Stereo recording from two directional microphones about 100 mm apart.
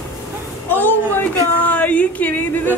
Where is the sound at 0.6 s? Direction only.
20° left (ahead or behind).